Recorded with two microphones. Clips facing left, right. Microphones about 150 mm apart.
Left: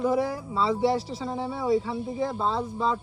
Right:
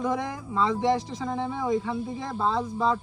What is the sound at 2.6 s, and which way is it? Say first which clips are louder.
Speech: right 1 dB; 5° left (ahead or behind).